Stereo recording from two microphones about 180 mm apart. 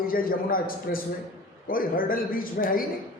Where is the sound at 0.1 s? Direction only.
55° left (ahead or behind).